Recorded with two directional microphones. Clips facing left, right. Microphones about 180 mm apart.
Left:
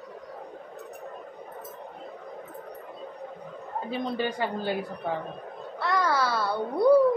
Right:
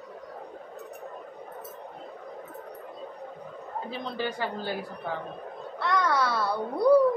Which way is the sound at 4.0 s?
15° left (ahead or behind).